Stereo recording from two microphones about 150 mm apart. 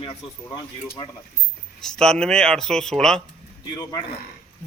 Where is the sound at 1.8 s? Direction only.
5° left (ahead or behind).